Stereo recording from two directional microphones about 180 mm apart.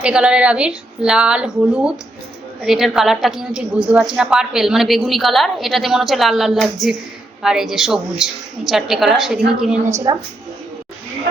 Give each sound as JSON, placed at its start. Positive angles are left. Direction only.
{"t": 0.0, "sound": "a woman's voice", "side_deg": -5}
{"t": 9.8, "sound": "a woman's voice", "side_deg": -20}